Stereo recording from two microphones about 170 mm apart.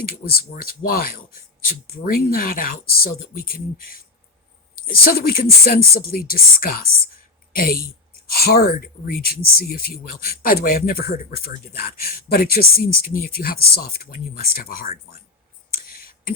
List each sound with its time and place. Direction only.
0.3 s speech: 60° left (ahead or behind)
4.9 s speech: 60° left (ahead or behind)